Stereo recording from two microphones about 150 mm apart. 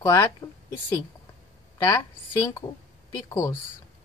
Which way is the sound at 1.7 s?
25° left (ahead or behind).